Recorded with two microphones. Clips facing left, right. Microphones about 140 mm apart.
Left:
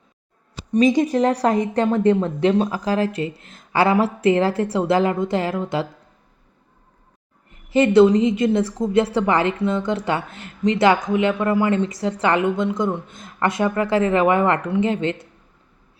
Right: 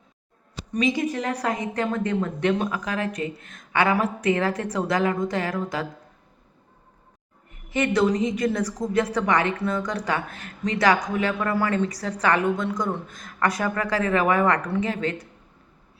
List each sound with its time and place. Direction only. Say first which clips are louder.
0.7 s speech: left 7 dB; 40° left (ahead or behind)
7.7 s speech: left 8 dB; 30° left (ahead or behind)